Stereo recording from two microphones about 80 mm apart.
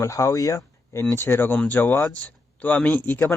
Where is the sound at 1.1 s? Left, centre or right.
Left.